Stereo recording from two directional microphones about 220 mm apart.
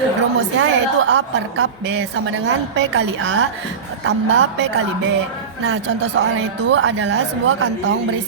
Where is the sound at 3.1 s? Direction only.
65° right (ahead or behind).